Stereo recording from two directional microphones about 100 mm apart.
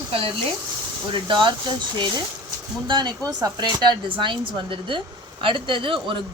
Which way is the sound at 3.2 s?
40° right (ahead or behind).